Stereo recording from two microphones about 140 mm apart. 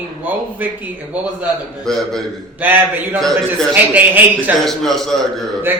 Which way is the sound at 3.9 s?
10° right (ahead or behind).